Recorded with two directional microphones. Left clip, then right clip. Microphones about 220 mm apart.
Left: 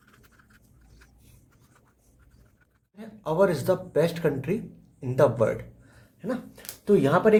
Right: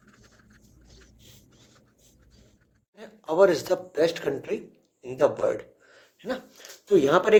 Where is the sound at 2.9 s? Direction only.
30° right (ahead or behind).